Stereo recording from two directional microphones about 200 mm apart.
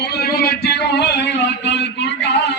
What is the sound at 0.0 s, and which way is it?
A man's voice, 55° left (ahead or behind).